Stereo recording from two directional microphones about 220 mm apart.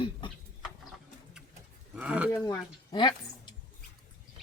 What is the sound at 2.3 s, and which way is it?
A woman's voice, 15° left (ahead or behind).